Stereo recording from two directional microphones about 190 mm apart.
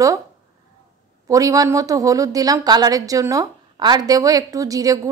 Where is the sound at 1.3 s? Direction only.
20° right (ahead or behind).